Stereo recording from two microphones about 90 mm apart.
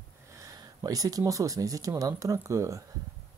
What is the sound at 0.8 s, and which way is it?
Speech, 45° right (ahead or behind).